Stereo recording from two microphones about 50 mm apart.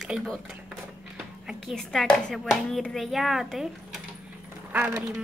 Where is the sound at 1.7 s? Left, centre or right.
Centre.